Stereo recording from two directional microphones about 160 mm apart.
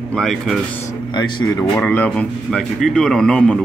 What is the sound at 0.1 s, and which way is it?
Speech, 5° left (ahead or behind).